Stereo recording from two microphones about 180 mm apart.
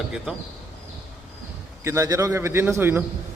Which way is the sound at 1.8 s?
15° right (ahead or behind).